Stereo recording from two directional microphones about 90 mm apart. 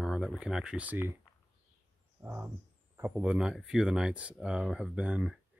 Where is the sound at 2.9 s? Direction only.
20° right (ahead or behind).